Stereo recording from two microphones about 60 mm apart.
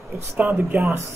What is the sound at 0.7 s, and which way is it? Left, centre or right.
Speech, right.